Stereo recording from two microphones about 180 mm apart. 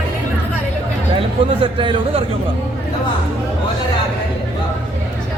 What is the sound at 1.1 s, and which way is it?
Speech, 30° right (ahead or behind).